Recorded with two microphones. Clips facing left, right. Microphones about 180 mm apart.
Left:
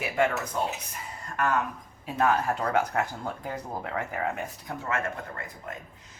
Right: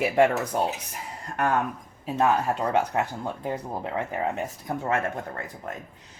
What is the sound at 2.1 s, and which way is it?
Speech, 20° right (ahead or behind).